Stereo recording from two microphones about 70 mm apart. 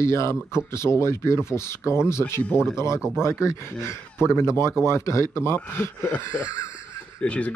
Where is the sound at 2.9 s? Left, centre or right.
Centre.